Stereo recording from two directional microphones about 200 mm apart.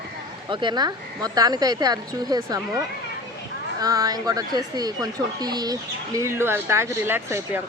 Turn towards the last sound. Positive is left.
turn(degrees=-10)  # may be behind; listen again after turning